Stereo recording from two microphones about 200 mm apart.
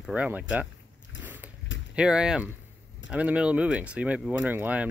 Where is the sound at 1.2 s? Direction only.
10° right (ahead or behind).